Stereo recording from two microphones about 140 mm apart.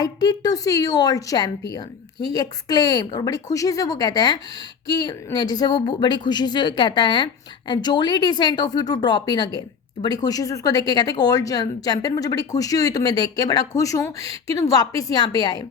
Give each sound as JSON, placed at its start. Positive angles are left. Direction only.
{"t": 0.0, "sound": "a woman's voice", "side_deg": 30}